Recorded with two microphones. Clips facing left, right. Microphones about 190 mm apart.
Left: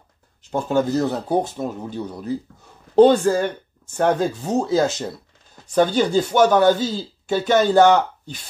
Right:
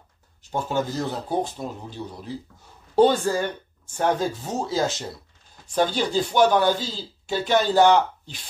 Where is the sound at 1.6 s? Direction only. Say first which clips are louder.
Left 6 dB; 50° left (ahead or behind).